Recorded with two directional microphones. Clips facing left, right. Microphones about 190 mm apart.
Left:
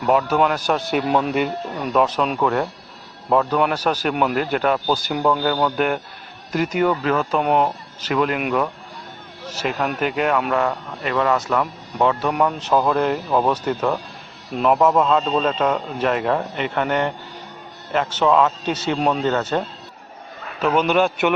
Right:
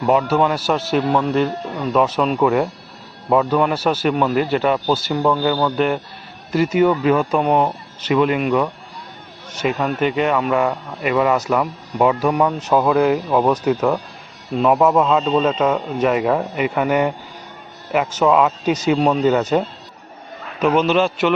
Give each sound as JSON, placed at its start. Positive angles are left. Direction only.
{"t": 0.0, "sound": "a man's voice", "side_deg": 0}
{"t": 1.0, "sound": "speech", "side_deg": 15}
{"t": 1.9, "sound": "a man's voice", "side_deg": -5}
{"t": 4.1, "sound": "speech", "side_deg": 10}
{"t": 4.4, "sound": "a man's voice", "side_deg": -5}
{"t": 7.4, "sound": "a man's voice", "side_deg": 0}
{"t": 9.6, "sound": "a man's voice", "side_deg": 0}
{"t": 20.7, "sound": "speech", "side_deg": 10}